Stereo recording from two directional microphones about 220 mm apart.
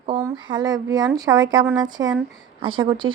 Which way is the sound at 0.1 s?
20° right (ahead or behind).